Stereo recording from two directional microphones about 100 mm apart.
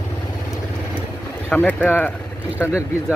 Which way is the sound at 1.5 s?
15° left (ahead or behind).